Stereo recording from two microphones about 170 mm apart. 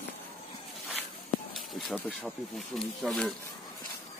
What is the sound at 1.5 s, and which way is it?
Speech, centre (ahead or behind).